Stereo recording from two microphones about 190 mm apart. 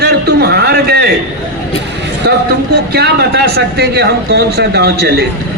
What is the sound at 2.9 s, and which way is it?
A man's voice, 60° right (ahead or behind).